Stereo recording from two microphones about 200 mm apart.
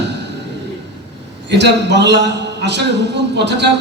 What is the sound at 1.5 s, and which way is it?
A man's voice, 60° right (ahead or behind).